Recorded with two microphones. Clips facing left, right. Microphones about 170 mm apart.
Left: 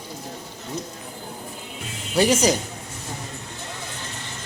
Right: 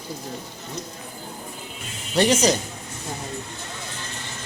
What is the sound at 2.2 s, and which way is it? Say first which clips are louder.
Speech: even; 10° left (ahead or behind).